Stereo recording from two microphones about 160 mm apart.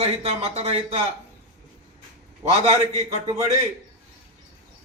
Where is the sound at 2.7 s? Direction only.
45° right (ahead or behind).